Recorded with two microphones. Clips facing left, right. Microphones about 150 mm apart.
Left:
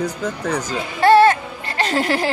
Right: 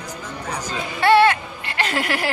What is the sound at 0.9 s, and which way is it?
Music, 40° left (ahead or behind).